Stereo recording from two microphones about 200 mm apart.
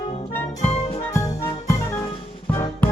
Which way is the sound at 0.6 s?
30° left (ahead or behind).